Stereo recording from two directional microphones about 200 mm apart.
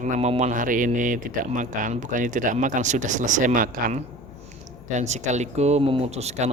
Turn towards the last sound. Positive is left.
turn(degrees=-35)  # may be behind; listen again after turning